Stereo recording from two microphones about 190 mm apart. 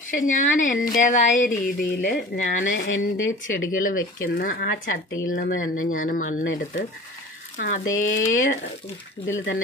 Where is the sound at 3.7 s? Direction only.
45° left (ahead or behind).